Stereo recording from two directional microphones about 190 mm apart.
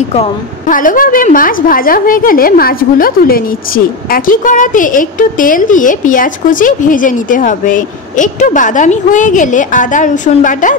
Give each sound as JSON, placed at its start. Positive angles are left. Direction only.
{"t": 0.7, "sound": "a woman's voice", "side_deg": 45}